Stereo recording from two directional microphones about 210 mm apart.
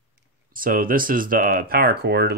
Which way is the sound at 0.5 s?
40° right (ahead or behind).